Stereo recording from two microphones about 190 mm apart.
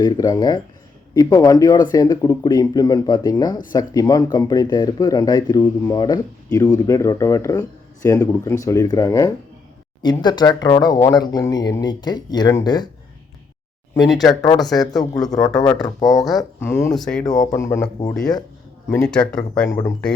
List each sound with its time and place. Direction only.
0.0 s speech: 20° left (ahead or behind)
14.0 s speech: centre (ahead or behind)
14.3 s speech: 20° left (ahead or behind)
14.7 s speech: centre (ahead or behind)
15.3 s speech: 20° left (ahead or behind)
16.0 s speech: centre (ahead or behind)
16.4 s speech: 10° left (ahead or behind)
18.9 s speech: 10° left (ahead or behind)
19.5 s speech: 15° left (ahead or behind)